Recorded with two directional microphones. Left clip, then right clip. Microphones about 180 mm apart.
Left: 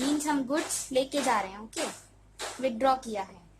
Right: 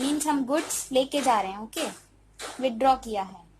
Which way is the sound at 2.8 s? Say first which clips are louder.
Right 4 dB; 35° right (ahead or behind).